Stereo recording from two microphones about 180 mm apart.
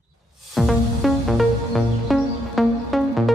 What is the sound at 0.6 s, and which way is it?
Music, centre (ahead or behind).